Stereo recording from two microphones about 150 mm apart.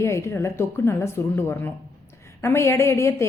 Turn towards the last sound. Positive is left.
turn(degrees=15)  # may be behind; listen again after turning